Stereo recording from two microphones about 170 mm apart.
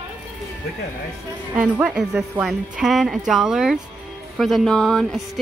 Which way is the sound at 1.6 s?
5° right (ahead or behind).